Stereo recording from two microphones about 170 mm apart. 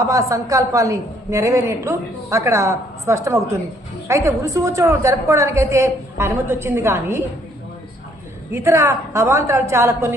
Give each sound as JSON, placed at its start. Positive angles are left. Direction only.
{"t": 0.0, "sound": "a woman's voice", "side_deg": -20}
{"t": 8.5, "sound": "a woman's voice", "side_deg": -15}